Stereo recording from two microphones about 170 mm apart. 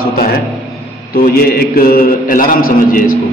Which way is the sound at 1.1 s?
60° left (ahead or behind).